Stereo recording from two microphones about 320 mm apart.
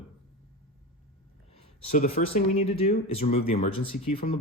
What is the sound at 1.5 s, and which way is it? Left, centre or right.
Speech, left.